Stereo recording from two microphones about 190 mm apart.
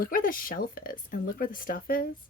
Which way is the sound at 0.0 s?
45° left (ahead or behind).